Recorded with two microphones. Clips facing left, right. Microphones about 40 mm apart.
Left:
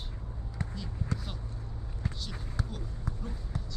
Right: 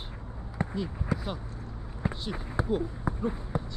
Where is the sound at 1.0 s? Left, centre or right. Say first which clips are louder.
Right 6 dB; centre.